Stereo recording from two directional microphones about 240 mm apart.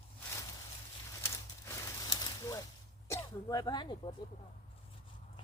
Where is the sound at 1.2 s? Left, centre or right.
Centre.